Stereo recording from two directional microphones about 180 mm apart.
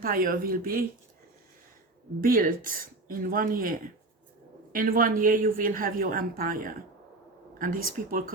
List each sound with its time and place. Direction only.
0.0 s a woman's voice: 50° right (ahead or behind)
2.2 s a woman's voice: 50° right (ahead or behind)